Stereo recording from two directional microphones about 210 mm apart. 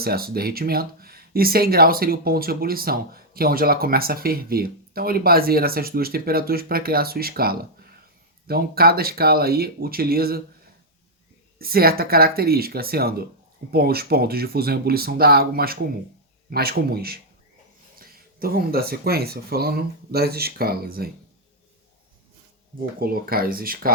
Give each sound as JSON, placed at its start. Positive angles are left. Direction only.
{"t": 0.0, "sound": "speech", "side_deg": -45}
{"t": 11.6, "sound": "speech", "side_deg": -45}
{"t": 23.0, "sound": "speech", "side_deg": -45}